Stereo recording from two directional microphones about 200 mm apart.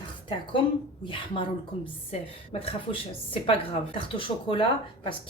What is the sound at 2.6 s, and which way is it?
A woman's voice, 25° left (ahead or behind).